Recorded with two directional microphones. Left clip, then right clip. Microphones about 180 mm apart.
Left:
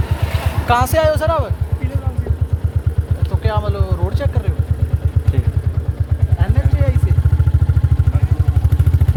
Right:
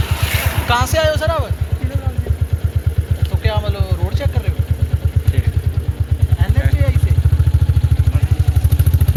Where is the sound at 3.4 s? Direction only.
90° left.